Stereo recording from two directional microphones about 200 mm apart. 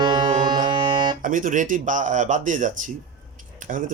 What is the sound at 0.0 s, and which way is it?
Music, 25° right (ahead or behind).